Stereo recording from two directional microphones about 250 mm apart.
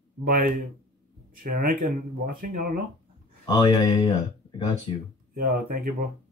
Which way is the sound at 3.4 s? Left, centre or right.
Centre.